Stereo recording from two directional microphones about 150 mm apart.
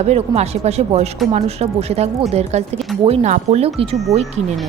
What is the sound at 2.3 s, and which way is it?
A woman's voice, 45° right (ahead or behind).